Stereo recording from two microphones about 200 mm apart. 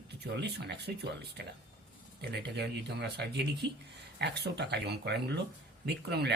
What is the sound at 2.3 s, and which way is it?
Speech, 55° right (ahead or behind).